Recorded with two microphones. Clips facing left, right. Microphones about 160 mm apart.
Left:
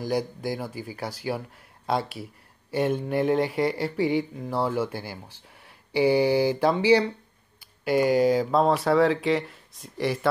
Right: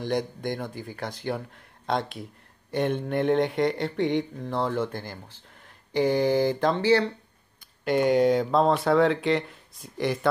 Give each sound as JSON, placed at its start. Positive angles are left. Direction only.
{"t": 0.0, "sound": "speech", "side_deg": 5}
{"t": 5.9, "sound": "mantra", "side_deg": 5}
{"t": 7.8, "sound": "speech", "side_deg": 5}